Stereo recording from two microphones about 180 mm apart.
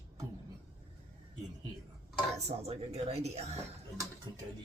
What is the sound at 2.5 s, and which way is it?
Speech, 35° right (ahead or behind).